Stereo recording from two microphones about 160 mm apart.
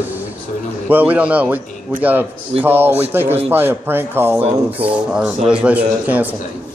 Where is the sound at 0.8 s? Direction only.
10° right (ahead or behind).